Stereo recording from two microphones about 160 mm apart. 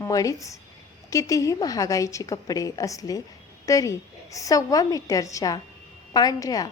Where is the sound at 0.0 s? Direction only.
20° left (ahead or behind).